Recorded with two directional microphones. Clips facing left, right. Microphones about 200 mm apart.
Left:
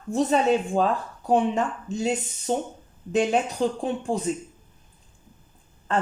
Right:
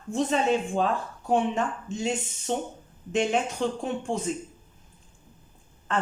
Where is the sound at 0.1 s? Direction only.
40° left (ahead or behind).